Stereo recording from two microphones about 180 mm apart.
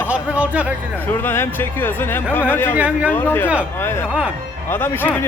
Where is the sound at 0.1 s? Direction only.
10° right (ahead or behind).